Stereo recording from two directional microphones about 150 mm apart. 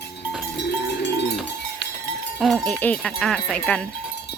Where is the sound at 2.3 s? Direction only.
Centre (ahead or behind).